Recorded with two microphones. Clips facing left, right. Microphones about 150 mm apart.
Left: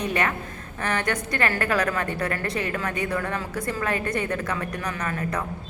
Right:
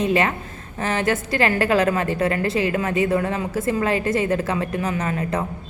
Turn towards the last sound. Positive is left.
turn(degrees=-25)  # may be behind; listen again after turning